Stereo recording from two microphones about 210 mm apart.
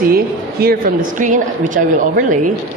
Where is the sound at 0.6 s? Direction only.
45° right (ahead or behind).